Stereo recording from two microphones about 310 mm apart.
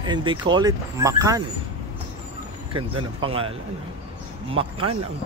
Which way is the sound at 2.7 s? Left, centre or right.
Centre.